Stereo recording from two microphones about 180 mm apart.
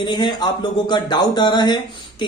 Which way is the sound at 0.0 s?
25° left (ahead or behind).